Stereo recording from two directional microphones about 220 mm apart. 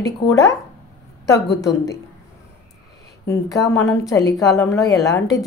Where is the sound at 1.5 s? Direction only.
50° left (ahead or behind).